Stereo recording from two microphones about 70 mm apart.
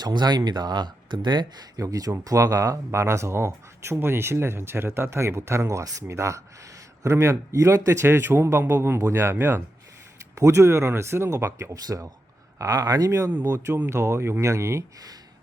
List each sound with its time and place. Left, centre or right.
0.0 s speech: right
1.9 s a man's voice: right
11.7 s a man's voice: right